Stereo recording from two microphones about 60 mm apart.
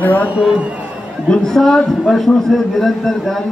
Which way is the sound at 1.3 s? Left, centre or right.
Centre.